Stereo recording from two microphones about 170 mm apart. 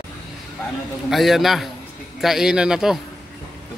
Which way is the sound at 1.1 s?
Centre (ahead or behind).